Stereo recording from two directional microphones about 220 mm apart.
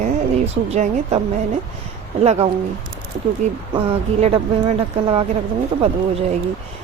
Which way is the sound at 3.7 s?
30° right (ahead or behind).